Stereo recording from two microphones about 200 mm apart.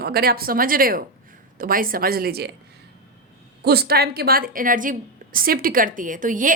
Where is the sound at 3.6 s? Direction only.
50° right (ahead or behind).